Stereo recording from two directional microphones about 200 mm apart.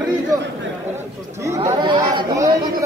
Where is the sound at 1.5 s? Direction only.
15° right (ahead or behind).